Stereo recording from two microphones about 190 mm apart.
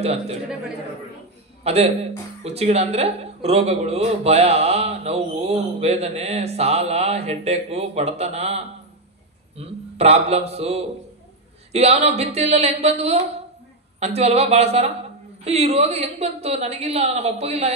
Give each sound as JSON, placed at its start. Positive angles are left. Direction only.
{"t": 0.0, "sound": "a woman's voice", "side_deg": -35}
{"t": 1.6, "sound": "a man's voice", "side_deg": -35}